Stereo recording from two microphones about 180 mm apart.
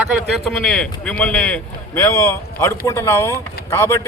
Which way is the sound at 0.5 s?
5° left (ahead or behind).